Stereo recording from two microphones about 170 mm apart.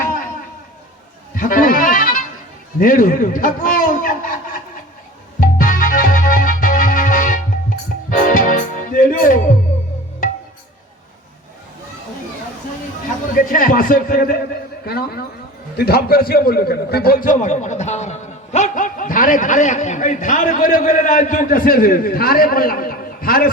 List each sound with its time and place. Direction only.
1.4 s music: 55° left (ahead or behind)
2.7 s a sound: 55° left (ahead or behind)
5.4 s music: 55° left (ahead or behind)
13.3 s a man's voice: 55° left (ahead or behind)
14.8 s a man's voice: 65° left (ahead or behind)